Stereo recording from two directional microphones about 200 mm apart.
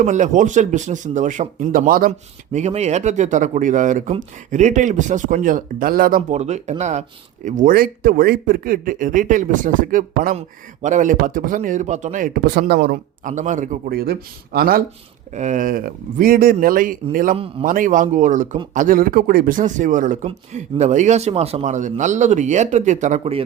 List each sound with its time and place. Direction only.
0.0 s speech: 40° right (ahead or behind)
17.3 s a man's voice: 30° right (ahead or behind)
17.7 s speech: 40° right (ahead or behind)